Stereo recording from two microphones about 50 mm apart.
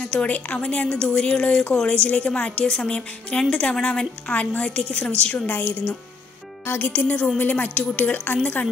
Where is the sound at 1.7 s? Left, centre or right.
Left.